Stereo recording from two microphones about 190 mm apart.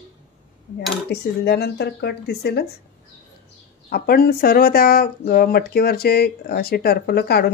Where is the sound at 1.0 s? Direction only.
60° left (ahead or behind).